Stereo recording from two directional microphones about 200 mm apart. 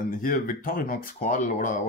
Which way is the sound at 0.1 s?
45° left (ahead or behind).